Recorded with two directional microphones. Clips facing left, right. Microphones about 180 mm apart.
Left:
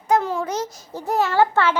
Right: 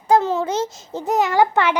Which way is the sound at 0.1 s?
25° right (ahead or behind).